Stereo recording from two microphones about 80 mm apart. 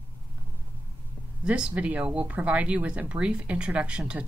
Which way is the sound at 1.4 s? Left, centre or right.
Centre.